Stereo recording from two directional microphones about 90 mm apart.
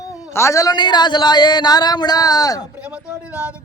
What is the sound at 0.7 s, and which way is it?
Music, 55° left (ahead or behind).